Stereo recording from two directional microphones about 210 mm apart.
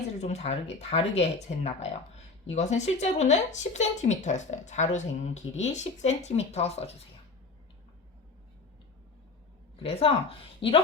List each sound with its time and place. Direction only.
0.2 s speech: 30° left (ahead or behind)
9.8 s a woman's voice: 25° left (ahead or behind)